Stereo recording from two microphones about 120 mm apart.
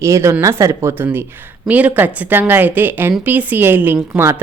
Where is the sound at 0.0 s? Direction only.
25° right (ahead or behind).